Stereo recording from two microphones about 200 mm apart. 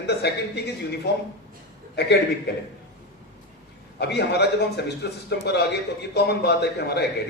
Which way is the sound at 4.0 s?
55° left (ahead or behind).